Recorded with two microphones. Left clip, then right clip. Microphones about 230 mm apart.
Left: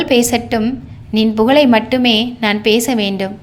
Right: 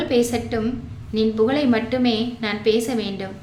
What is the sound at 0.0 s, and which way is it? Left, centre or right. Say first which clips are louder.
A woman's voice: left 7 dB; left.